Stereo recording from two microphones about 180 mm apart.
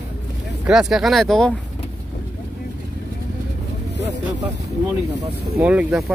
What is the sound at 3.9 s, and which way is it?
Speech, 75° left (ahead or behind).